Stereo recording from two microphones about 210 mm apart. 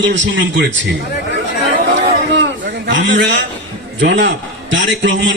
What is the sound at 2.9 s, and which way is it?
A man's voice, 60° right (ahead or behind).